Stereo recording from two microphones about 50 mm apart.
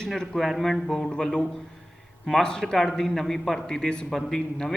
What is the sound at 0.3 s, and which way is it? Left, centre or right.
A man's voice, centre.